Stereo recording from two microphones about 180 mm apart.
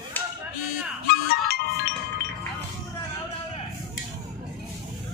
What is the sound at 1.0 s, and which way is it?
Music, 60° left (ahead or behind).